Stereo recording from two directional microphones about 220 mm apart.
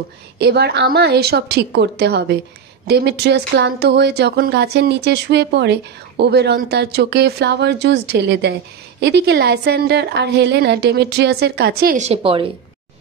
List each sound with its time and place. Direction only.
0.4 s speech: 45° right (ahead or behind); by 12.5 s 25° right (ahead or behind)